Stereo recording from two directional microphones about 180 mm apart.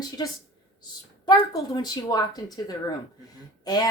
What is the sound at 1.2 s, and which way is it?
A woman's voice, 20° left (ahead or behind).